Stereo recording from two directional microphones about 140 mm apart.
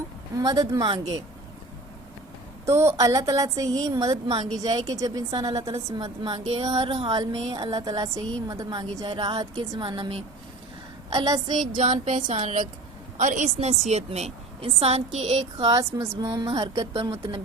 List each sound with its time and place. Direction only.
0.3 s a woman's voice: 30° right (ahead or behind)
2.6 s a woman's voice: 20° right (ahead or behind); by 7.1 s 40° right (ahead or behind)
7.1 s a woman's voice: 30° right (ahead or behind)
11.6 s a sound: 65° right (ahead or behind)
12.0 s speech: 70° right (ahead or behind)
12.4 s a sound: 55° right (ahead or behind)
13.1 s a woman's voice: 65° right (ahead or behind)
15.6 s a woman's voice: 25° right (ahead or behind)
16.6 s speech: 35° right (ahead or behind)